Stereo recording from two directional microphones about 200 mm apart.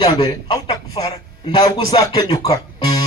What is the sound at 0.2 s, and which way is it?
A man's voice, 20° left (ahead or behind).